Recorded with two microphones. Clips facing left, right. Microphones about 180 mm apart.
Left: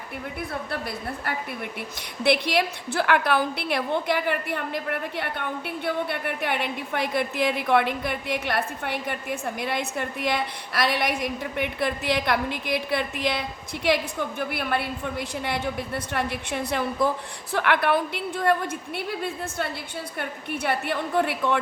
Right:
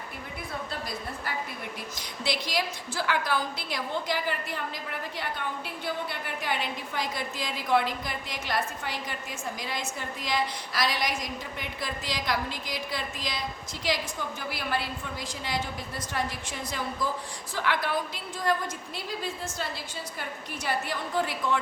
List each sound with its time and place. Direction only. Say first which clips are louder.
0.7 s a woman's voice: left 5 dB; 60° left (ahead or behind)